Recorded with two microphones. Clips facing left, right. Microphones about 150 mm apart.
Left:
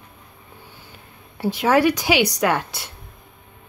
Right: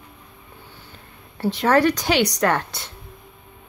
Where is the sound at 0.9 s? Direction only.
10° left (ahead or behind).